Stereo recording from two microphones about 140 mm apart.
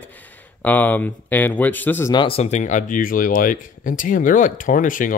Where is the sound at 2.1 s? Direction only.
40° left (ahead or behind).